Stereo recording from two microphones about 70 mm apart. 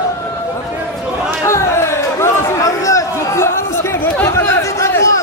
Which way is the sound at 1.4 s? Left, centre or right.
Left.